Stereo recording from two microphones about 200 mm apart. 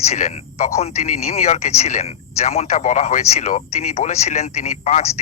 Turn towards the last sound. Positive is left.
turn(degrees=30)  # may be behind; listen again after turning